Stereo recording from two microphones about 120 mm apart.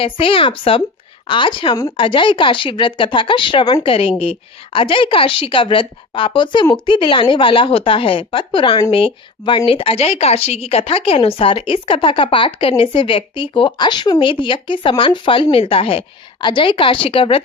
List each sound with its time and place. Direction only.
0.0 s speech: 50° left (ahead or behind)
3.8 s speech: 50° left (ahead or behind)